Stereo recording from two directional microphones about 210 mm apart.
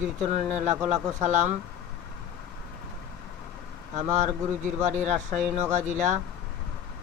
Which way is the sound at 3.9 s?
35° right (ahead or behind).